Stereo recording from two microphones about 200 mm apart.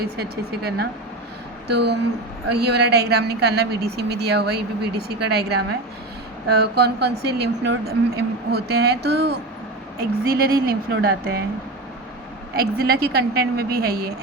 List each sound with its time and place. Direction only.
0.0 s a woman's voice: 50° right (ahead or behind)
12.5 s a woman's voice: 50° right (ahead or behind)